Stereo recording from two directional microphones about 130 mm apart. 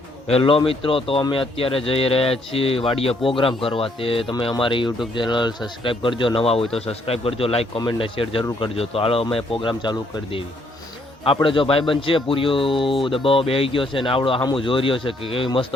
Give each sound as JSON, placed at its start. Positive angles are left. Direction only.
{"t": 0.3, "sound": "speech", "side_deg": 50}
{"t": 11.4, "sound": "speech", "side_deg": 40}